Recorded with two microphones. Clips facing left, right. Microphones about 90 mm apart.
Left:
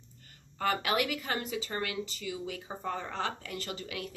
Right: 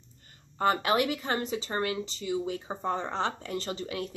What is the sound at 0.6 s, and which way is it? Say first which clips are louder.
Speech: right 4 dB; 30° right (ahead or behind).